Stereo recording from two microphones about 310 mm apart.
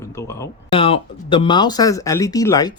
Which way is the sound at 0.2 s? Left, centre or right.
Centre.